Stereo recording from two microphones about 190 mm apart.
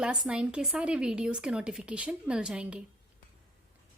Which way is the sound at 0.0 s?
5° right (ahead or behind).